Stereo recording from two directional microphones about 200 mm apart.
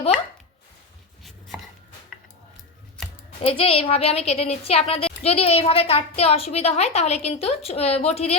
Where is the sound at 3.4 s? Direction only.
30° left (ahead or behind).